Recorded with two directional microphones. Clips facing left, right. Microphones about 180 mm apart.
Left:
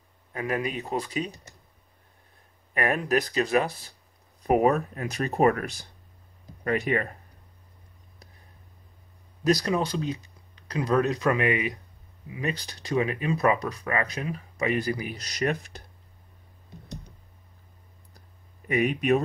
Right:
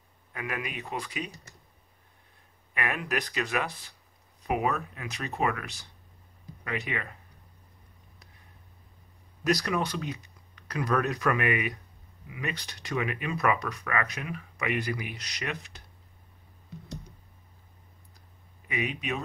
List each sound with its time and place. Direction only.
0.3 s speech: 35° left (ahead or behind)
2.7 s speech: 40° left (ahead or behind)
9.4 s speech: 25° left (ahead or behind); by 15.8 s 45° left (ahead or behind)
18.7 s speech: 50° left (ahead or behind)